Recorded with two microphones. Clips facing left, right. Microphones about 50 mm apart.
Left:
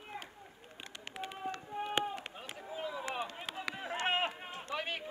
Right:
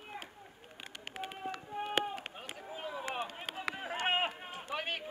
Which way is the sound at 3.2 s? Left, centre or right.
Centre.